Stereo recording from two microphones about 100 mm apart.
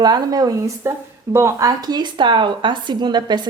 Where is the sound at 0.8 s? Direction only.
25° right (ahead or behind).